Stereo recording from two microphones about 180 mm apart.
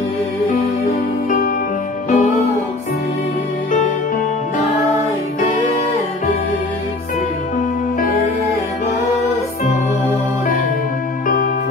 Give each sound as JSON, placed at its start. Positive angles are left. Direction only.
{"t": 0.5, "sound": "music", "side_deg": 50}